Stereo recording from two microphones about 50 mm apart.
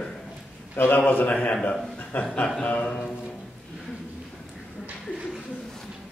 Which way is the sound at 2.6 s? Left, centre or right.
Left.